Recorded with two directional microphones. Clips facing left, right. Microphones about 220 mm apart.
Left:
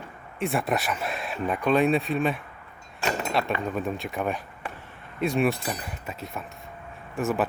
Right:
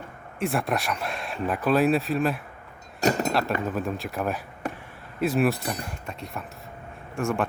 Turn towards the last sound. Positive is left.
turn(degrees=5)  # may be behind; listen again after turning